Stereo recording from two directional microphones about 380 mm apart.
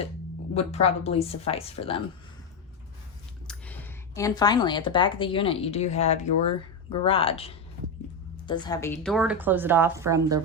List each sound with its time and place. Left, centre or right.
0.5 s a woman's voice: centre
3.4 s a woman's voice: centre